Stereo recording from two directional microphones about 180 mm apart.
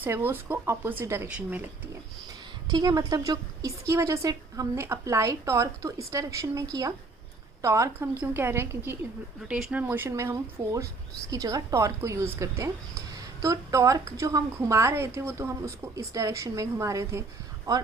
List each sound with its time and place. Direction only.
0.0 s a woman's voice: 10° right (ahead or behind)
2.6 s a woman's voice: 20° right (ahead or behind)